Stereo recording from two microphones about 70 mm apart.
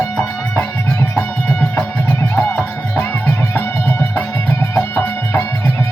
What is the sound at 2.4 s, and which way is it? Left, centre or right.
Music, left.